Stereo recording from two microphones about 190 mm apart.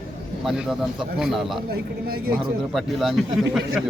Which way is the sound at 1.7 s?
55° right (ahead or behind).